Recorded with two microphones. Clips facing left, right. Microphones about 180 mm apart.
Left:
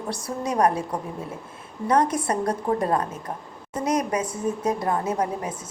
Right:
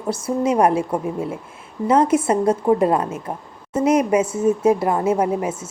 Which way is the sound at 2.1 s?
25° right (ahead or behind).